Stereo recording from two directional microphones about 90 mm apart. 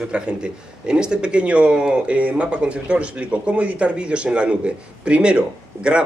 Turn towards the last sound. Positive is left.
turn(degrees=-10)  # may be behind; listen again after turning